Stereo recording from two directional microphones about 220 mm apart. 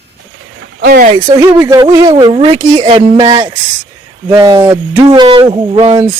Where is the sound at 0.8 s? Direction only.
45° right (ahead or behind).